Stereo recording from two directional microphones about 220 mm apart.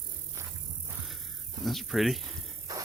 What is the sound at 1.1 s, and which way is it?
Insect, centre (ahead or behind).